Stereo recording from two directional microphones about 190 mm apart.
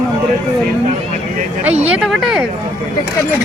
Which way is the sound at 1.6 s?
5° right (ahead or behind).